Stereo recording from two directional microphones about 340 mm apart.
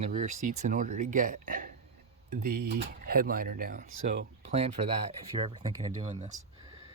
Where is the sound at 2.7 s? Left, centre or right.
Right.